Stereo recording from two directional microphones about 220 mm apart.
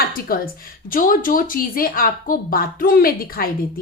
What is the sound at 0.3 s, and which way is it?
A woman's voice, 40° left (ahead or behind).